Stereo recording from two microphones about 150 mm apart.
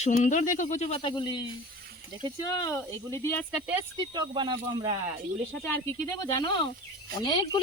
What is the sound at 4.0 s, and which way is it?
Speech, 30° right (ahead or behind).